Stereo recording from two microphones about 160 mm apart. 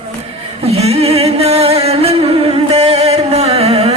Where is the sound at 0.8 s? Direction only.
40° right (ahead or behind).